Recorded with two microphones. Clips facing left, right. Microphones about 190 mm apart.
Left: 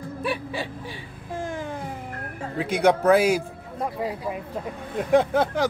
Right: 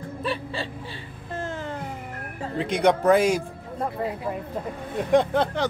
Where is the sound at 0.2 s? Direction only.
15° left (ahead or behind).